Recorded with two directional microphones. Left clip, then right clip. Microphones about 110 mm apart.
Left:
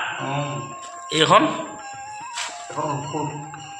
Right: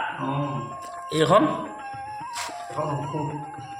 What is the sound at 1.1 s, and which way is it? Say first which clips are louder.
Speech: left 3 dB; 30° right (ahead or behind).